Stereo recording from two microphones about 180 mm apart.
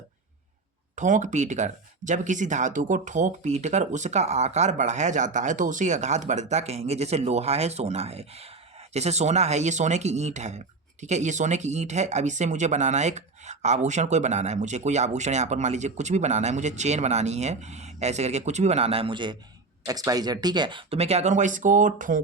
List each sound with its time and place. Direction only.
0.9 s speech: 45° right (ahead or behind)